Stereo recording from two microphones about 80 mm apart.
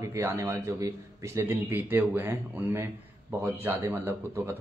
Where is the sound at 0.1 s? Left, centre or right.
Right.